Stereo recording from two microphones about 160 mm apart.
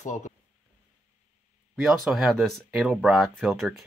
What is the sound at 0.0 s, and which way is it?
Speech, 50° left (ahead or behind).